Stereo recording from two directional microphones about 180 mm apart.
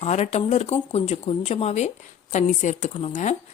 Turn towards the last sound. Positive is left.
turn(degrees=40)  # may be behind; listen again after turning